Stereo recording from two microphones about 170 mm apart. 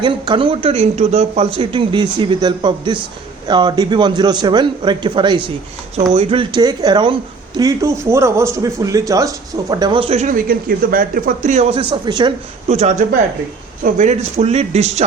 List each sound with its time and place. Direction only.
0.0 s speech: 30° right (ahead or behind)
12.6 s a man's voice: 45° right (ahead or behind)